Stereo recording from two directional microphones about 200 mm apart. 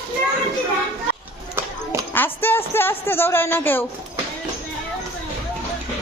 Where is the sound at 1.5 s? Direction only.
10° right (ahead or behind).